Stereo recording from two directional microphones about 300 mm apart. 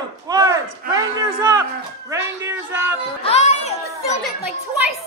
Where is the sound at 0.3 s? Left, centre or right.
Centre.